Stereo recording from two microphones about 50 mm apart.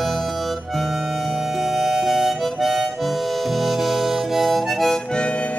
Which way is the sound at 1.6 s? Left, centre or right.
Centre.